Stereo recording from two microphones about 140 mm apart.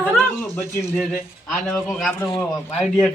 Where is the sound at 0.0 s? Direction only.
5° left (ahead or behind).